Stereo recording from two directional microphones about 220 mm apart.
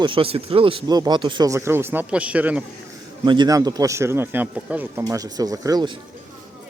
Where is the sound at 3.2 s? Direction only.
20° right (ahead or behind).